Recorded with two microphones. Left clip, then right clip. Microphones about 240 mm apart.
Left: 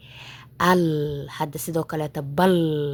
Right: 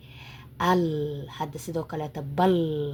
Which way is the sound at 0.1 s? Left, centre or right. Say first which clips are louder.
Left 5 dB; left.